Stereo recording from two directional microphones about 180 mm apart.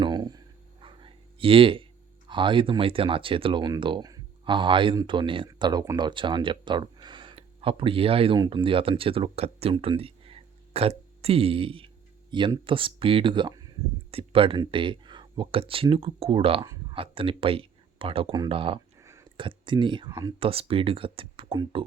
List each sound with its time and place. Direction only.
0.0 s speech: 20° right (ahead or behind)
18.9 s a sound: 15° right (ahead or behind)
19.4 s speech: 25° right (ahead or behind)
20.4 s speech: 30° right (ahead or behind)